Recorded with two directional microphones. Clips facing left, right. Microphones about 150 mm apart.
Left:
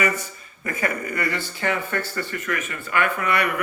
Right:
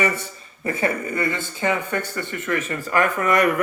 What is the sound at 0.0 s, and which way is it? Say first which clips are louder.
A man's voice: right 1 dB; 30° right (ahead or behind).